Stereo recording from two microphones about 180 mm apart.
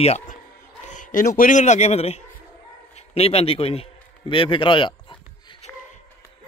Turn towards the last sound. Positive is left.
turn(degrees=35)  # may be behind; listen again after turning